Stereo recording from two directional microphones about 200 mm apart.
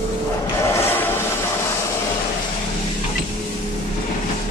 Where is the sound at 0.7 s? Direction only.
10° left (ahead or behind).